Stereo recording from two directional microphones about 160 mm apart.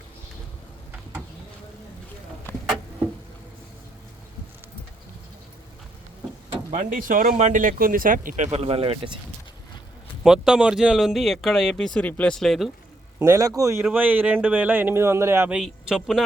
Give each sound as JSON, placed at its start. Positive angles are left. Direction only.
{"t": 6.7, "sound": "speech", "side_deg": -55}
{"t": 8.5, "sound": "speech", "side_deg": -40}
{"t": 10.2, "sound": "speech", "side_deg": -5}
{"t": 13.1, "sound": "a man's voice", "side_deg": -15}